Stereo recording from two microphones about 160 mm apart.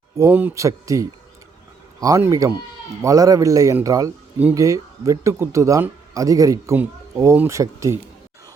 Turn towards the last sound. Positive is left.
turn(degrees=-20)  # may be behind; listen again after turning